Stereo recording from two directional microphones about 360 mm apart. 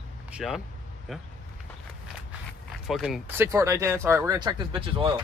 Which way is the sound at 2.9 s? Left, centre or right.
Centre.